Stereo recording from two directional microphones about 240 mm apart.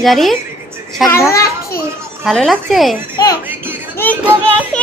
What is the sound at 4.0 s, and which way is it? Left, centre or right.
Music, centre.